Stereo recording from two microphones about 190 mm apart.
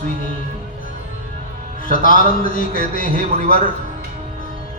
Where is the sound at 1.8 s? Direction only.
45° left (ahead or behind).